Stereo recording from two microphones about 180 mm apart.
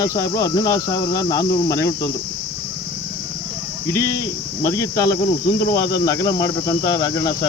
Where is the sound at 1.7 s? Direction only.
15° left (ahead or behind).